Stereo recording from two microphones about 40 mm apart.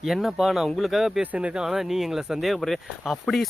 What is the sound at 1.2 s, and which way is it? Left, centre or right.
Speech, right.